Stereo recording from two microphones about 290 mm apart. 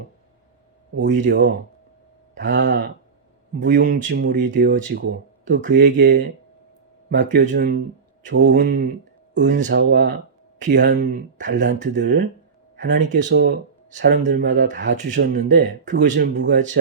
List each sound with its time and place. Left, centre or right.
0.9 s speech: right
8.3 s speech: right
11.8 s speech: right
12.7 s a sound: right
13.0 s speech: right
13.2 s speech: right
16.6 s speech: right